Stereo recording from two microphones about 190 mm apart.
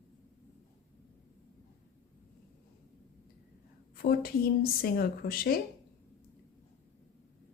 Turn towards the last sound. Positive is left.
turn(degrees=50)  # may be behind; listen again after turning